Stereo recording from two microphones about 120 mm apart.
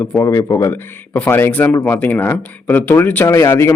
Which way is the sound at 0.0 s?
25° left (ahead or behind).